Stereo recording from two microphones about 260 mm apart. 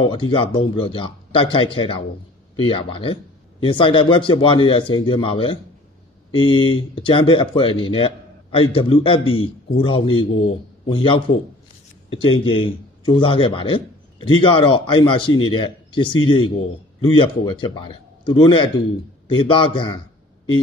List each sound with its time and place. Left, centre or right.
0.0 s a man's voice: centre